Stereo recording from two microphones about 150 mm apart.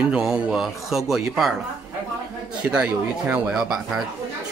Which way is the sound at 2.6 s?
5° right (ahead or behind).